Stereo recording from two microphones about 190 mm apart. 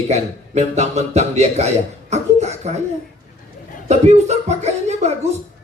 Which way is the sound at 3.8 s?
35° right (ahead or behind).